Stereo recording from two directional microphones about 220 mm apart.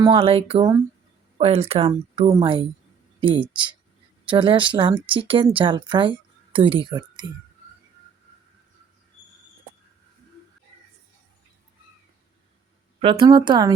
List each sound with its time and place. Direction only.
0.0 s a woman's voice: 25° right (ahead or behind)
13.0 s a woman's voice: 20° right (ahead or behind)